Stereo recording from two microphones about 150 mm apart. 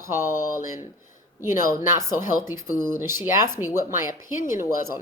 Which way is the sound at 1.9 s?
20° right (ahead or behind).